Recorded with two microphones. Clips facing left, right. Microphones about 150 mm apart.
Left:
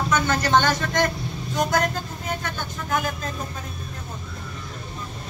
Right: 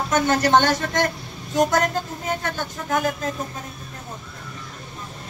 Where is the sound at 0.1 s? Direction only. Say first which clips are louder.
Right 4 dB; 40° right (ahead or behind).